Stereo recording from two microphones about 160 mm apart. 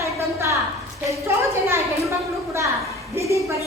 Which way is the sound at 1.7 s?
15° right (ahead or behind).